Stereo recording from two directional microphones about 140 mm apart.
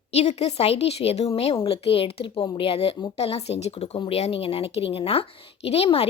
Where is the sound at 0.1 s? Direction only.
45° left (ahead or behind).